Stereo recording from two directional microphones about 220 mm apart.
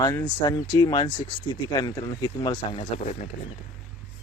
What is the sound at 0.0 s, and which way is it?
Speech, 15° left (ahead or behind).